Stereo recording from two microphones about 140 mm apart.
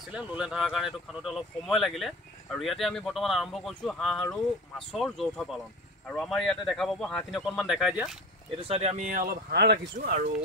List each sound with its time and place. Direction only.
0.1 s speech: 5° right (ahead or behind)
8.5 s speech: 45° right (ahead or behind)
8.9 s speech: 70° right (ahead or behind)
9.9 s speech: 65° right (ahead or behind)